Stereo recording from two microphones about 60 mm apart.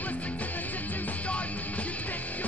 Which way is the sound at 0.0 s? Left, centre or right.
Left.